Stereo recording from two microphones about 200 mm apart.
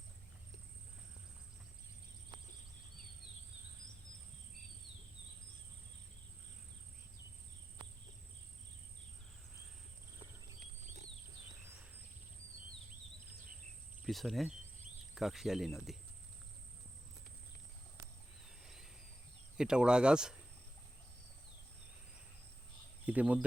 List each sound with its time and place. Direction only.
14.0 s cricket: centre (ahead or behind)
15.1 s speech: centre (ahead or behind)
18.6 s a sound: centre (ahead or behind)
19.5 s speech: 5° right (ahead or behind)
23.0 s speech: 5° right (ahead or behind)